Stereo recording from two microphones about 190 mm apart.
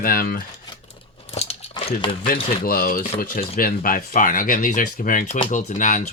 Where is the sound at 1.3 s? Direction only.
35° left (ahead or behind).